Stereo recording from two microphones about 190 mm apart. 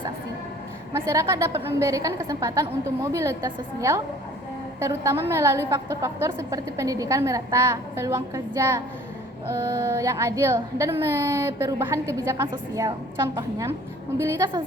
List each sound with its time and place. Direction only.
1.1 s a woman's voice: 15° right (ahead or behind)